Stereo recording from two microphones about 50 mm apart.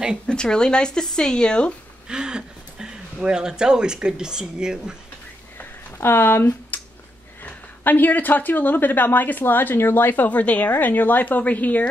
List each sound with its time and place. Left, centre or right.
0.3 s speech: centre
2.0 s speech: centre
5.9 s speech: left
6.7 s a sound: left
7.4 s a woman's voice: left